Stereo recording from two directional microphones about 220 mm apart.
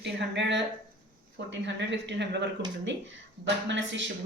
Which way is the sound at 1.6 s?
55° right (ahead or behind).